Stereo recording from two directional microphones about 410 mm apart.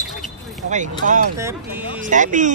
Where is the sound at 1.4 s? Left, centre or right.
Centre.